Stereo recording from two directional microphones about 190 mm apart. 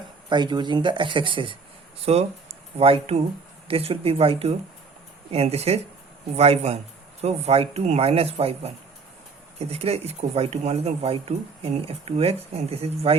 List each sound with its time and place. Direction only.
0.3 s speech: 25° right (ahead or behind)